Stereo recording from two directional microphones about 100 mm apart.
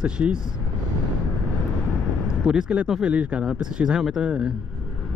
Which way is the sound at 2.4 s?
10° right (ahead or behind).